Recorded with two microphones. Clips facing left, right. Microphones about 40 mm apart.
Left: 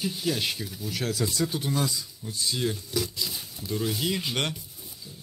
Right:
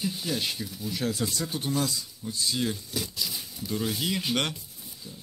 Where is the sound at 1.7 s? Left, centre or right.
Centre.